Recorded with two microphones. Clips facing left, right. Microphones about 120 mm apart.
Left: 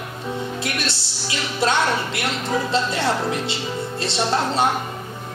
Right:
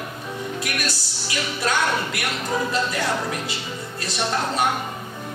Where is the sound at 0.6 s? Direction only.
25° left (ahead or behind).